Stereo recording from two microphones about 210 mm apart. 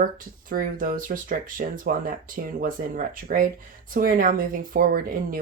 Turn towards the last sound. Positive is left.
turn(degrees=-45)  # may be behind; listen again after turning